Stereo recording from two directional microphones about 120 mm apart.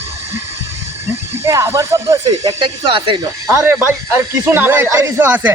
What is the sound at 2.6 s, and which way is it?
Speech, 45° right (ahead or behind).